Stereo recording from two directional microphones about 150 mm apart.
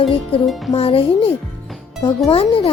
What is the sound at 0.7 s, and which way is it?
A child's voice, 40° left (ahead or behind).